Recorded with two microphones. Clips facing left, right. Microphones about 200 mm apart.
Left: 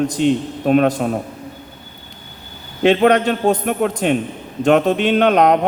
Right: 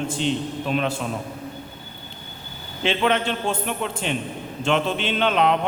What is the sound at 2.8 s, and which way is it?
A man's voice, 45° left (ahead or behind).